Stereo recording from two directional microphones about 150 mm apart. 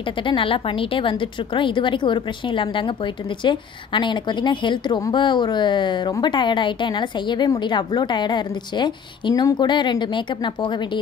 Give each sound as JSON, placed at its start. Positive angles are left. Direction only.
{"t": 0.0, "sound": "a woman's voice", "side_deg": 35}